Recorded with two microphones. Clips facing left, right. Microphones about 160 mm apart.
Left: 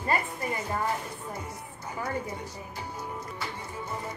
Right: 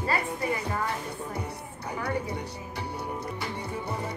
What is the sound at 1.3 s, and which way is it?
Speech, 65° right (ahead or behind).